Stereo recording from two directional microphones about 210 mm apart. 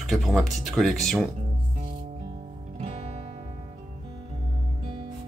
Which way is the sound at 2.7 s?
30° right (ahead or behind).